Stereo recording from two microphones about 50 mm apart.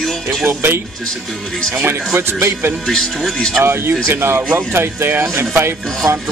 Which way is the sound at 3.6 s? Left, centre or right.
Right.